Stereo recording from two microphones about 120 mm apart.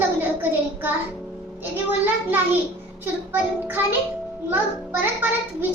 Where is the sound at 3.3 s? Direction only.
15° right (ahead or behind).